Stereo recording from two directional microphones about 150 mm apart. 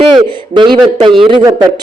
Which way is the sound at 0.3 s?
30° right (ahead or behind).